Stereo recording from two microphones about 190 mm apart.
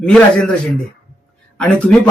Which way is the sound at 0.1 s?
5° left (ahead or behind).